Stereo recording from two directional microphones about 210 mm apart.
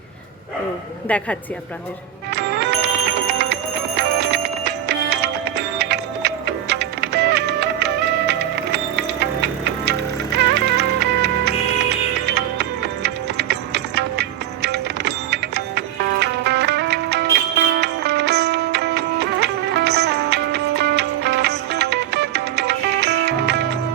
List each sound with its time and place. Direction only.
1.0 s a woman's voice: 5° left (ahead or behind)
2.3 s music: 55° right (ahead or behind)